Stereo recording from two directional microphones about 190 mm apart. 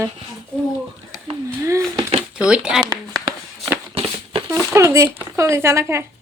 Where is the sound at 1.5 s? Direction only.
15° right (ahead or behind).